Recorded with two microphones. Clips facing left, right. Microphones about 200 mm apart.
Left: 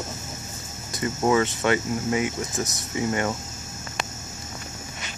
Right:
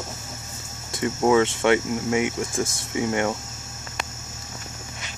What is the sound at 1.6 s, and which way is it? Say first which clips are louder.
Speech: right 3 dB; 15° right (ahead or behind).